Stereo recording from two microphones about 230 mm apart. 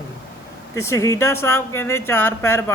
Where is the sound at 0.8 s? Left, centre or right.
Centre.